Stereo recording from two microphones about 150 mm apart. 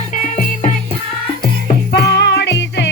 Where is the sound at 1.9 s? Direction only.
90° left.